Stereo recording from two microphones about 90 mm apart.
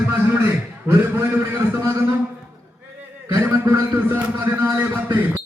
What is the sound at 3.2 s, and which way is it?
A man's voice, 35° right (ahead or behind).